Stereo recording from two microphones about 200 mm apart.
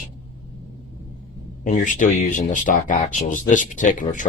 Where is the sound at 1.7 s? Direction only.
40° left (ahead or behind).